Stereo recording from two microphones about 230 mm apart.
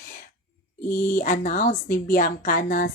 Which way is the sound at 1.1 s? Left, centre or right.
Left.